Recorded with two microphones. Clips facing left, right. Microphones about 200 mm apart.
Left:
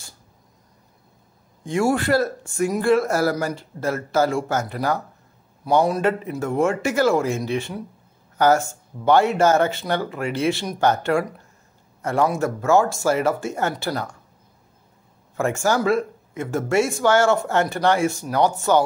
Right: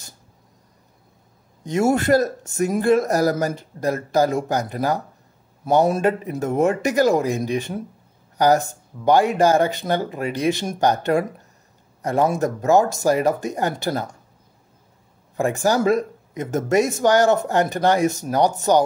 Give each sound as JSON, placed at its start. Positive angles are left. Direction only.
{"t": 1.6, "sound": "a man's voice", "side_deg": -20}
{"t": 15.3, "sound": "speech", "side_deg": -15}